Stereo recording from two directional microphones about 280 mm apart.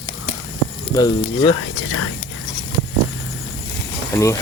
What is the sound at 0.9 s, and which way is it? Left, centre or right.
Speech, centre.